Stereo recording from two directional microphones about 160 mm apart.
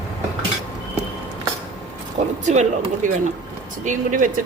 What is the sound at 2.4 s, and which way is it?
Speech, 50° right (ahead or behind).